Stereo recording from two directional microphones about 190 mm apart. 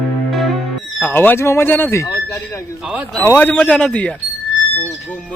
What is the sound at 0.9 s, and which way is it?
Speech, 10° left (ahead or behind).